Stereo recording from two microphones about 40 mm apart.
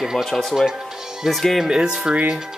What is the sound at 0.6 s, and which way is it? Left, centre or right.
Music, centre.